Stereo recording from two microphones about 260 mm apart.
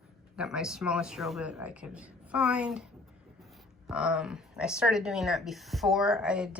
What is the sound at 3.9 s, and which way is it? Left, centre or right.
Speech, centre.